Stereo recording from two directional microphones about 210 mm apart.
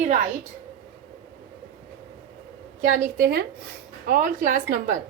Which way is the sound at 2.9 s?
40° right (ahead or behind).